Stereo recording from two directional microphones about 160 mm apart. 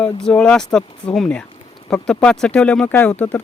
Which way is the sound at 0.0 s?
5° left (ahead or behind).